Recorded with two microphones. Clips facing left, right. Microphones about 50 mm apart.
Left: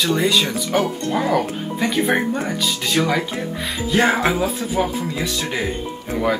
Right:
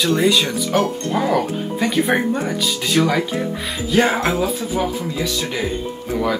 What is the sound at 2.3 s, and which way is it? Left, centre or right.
Speech, left.